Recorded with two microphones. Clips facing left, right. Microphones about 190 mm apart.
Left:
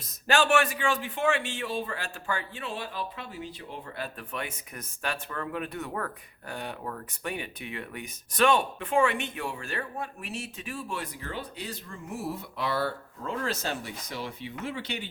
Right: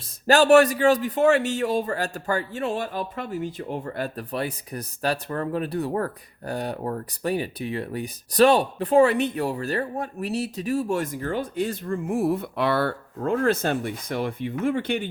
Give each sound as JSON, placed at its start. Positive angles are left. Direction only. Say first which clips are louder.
{"t": 0.3, "sound": "a man's voice", "louder": "right 9 dB", "side_deg": -40}